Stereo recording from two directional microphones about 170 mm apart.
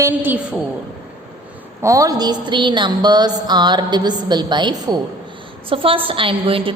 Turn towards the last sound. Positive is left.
turn(degrees=-30)  # may be behind; listen again after turning